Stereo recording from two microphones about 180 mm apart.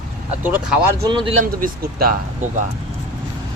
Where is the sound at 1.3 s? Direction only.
45° right (ahead or behind).